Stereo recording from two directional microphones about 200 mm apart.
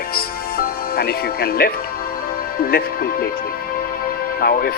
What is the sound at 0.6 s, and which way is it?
Speech, 50° left (ahead or behind).